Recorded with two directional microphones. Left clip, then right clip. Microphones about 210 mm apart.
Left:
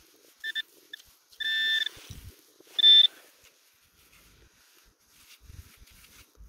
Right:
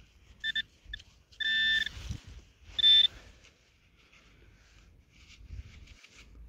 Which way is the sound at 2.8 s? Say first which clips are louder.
Left 5 dB; 25° left (ahead or behind).